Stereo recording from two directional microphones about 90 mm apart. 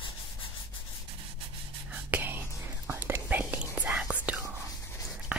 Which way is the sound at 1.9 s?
15° right (ahead or behind).